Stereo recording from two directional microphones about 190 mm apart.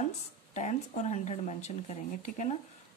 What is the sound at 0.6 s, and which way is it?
Speech, 40° left (ahead or behind).